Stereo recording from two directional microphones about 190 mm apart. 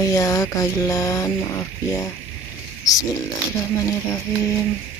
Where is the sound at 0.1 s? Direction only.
20° left (ahead or behind).